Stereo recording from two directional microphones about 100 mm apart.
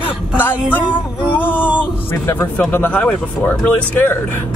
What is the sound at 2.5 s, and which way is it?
Speech, 15° left (ahead or behind).